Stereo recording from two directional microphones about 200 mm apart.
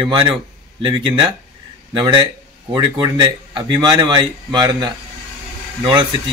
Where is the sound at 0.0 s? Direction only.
25° right (ahead or behind).